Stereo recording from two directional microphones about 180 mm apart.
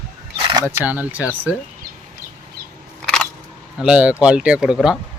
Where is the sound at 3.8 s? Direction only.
5° right (ahead or behind).